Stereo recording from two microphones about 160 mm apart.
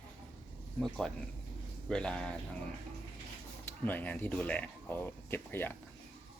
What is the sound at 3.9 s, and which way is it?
Speech, 10° left (ahead or behind).